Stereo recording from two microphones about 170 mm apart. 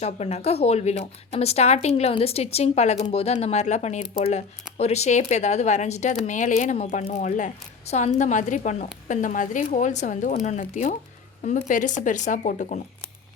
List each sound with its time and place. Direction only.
0.0 s speech: 40° left (ahead or behind)